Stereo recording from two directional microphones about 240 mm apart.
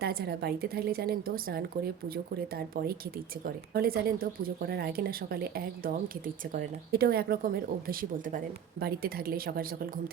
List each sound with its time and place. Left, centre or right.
0.0 s speech: right